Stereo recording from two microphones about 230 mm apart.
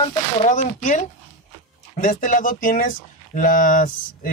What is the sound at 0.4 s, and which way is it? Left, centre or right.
Speech, left.